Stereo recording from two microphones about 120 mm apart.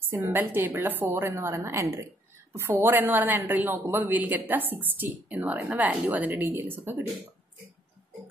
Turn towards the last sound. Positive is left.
turn(degrees=-15)  # may be behind; listen again after turning